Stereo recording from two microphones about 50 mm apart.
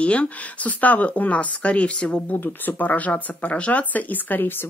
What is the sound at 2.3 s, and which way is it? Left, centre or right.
Speech, left.